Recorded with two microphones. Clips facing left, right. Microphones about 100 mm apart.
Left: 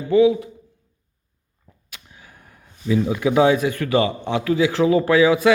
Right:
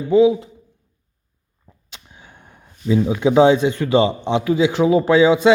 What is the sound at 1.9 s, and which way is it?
Speech, 25° right (ahead or behind).